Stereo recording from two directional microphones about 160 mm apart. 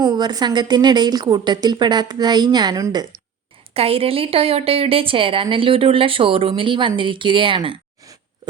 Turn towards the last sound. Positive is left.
turn(degrees=-30)  # may be behind; listen again after turning